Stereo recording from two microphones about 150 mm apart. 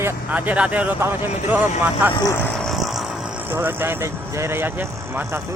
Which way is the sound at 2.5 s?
Centre (ahead or behind).